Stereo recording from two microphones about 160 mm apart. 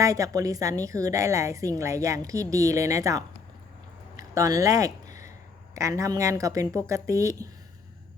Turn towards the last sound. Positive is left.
turn(degrees=-20)  # may be behind; listen again after turning